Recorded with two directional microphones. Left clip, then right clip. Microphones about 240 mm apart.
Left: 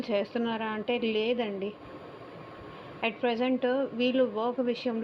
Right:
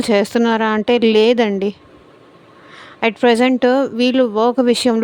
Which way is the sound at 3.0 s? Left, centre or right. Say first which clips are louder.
Right 15 dB; right.